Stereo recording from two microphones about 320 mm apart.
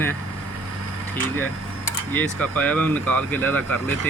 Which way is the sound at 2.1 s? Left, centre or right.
Centre.